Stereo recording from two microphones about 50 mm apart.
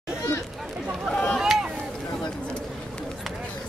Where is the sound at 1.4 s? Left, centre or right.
Centre.